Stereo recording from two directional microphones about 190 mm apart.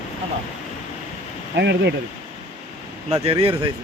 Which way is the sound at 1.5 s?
65° right (ahead or behind).